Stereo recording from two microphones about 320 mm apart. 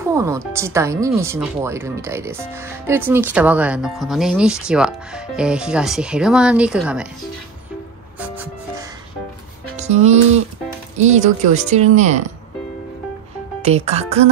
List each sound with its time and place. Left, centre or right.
0.1 s speech: centre
8.2 s music: centre
9.8 s speech: right
13.6 s speech: centre